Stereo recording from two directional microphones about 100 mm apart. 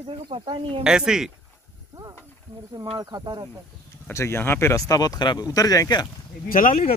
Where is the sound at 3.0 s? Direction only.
40° right (ahead or behind).